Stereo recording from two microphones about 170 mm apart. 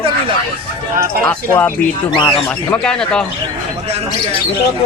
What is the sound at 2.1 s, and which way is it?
Speech, 30° left (ahead or behind).